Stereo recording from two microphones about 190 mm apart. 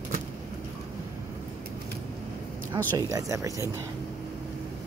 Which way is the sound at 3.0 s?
15° right (ahead or behind).